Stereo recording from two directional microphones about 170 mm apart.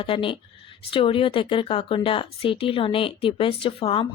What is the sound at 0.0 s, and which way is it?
Speech, 30° left (ahead or behind).